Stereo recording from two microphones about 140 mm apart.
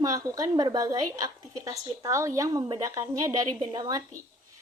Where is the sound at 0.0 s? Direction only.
25° right (ahead or behind).